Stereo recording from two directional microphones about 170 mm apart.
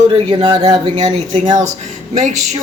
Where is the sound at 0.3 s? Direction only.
30° right (ahead or behind).